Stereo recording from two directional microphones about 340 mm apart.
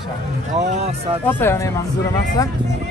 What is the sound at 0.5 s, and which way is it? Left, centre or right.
Speech, centre.